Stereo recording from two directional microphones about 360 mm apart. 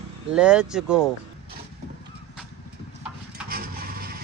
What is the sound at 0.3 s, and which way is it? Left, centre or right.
Speech, centre.